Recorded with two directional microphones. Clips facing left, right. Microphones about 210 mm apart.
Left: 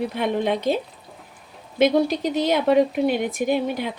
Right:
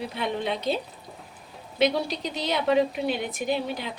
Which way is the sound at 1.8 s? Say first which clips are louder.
Left 6 dB; 50° left (ahead or behind).